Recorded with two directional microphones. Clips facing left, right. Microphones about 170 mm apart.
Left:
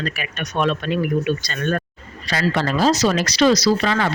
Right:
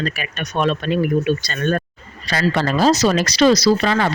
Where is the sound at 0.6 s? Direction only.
35° right (ahead or behind).